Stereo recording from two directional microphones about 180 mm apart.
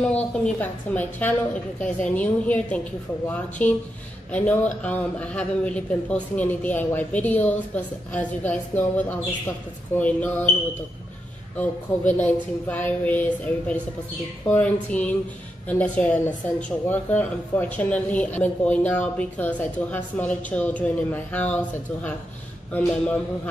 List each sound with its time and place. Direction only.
0.1 s a woman's voice: 10° left (ahead or behind)
11.5 s a woman's voice: 10° left (ahead or behind)
14.5 s a woman's voice: 5° left (ahead or behind)